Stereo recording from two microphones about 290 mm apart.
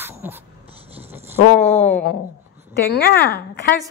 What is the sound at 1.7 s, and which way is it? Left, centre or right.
Speech, centre.